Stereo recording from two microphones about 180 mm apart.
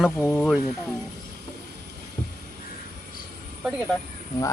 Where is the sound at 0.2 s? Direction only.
15° left (ahead or behind).